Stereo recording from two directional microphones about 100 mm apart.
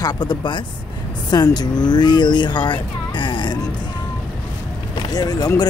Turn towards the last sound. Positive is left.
turn(degrees=40)  # may be behind; listen again after turning